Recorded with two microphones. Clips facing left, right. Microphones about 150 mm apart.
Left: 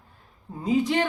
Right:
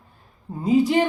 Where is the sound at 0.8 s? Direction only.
5° right (ahead or behind).